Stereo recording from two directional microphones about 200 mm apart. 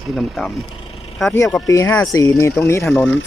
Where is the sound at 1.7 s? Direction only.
10° left (ahead or behind).